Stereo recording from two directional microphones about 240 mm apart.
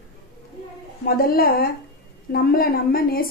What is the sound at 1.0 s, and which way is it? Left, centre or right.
Speech, left.